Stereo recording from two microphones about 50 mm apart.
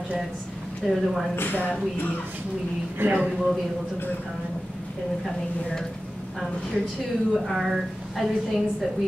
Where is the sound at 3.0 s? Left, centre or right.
Right.